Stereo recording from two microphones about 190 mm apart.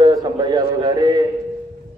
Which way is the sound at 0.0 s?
20° right (ahead or behind).